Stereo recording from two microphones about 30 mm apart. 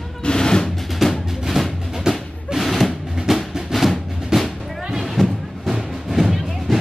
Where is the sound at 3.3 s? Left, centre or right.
Centre.